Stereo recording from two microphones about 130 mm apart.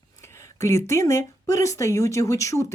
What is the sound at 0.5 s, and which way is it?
Speech, 20° left (ahead or behind).